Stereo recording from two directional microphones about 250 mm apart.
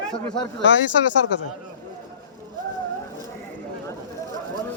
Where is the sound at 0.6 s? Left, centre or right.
Left.